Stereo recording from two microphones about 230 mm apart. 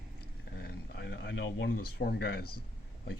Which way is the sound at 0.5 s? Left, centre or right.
Left.